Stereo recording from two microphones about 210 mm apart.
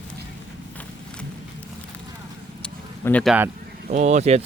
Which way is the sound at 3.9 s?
35° right (ahead or behind).